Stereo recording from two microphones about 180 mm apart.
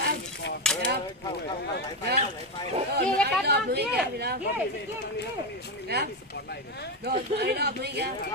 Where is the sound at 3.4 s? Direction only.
65° right (ahead or behind).